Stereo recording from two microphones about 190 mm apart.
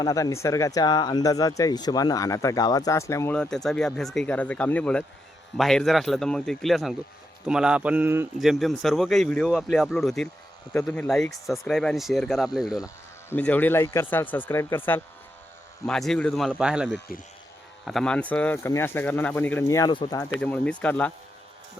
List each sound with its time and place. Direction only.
0.0 s speech: 15° left (ahead or behind); by 12.8 s centre (ahead or behind)
13.3 s speech: 10° left (ahead or behind)
20.4 s speech: 5° left (ahead or behind)